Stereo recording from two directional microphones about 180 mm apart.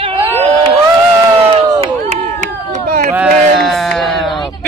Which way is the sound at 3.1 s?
5° right (ahead or behind).